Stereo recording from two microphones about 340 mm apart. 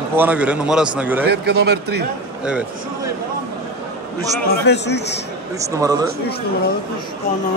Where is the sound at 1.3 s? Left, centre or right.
Right.